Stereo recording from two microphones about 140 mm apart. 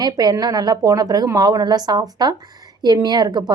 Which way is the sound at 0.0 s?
30° right (ahead or behind).